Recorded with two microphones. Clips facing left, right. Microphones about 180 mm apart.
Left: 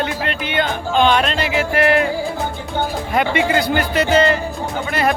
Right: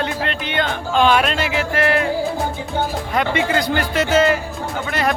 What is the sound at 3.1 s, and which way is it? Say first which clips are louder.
A man's voice: left 2 dB; 10° left (ahead or behind).